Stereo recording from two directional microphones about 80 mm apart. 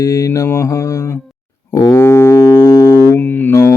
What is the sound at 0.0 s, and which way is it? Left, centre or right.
Mantra, left.